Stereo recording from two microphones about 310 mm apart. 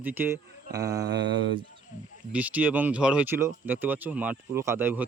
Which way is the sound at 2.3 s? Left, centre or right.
Centre.